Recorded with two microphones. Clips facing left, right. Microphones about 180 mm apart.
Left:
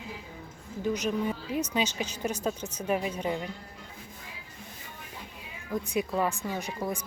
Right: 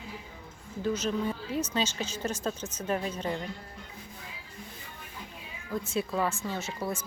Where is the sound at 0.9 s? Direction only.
15° left (ahead or behind).